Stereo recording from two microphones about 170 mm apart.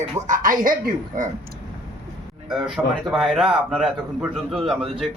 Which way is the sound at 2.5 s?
Centre (ahead or behind).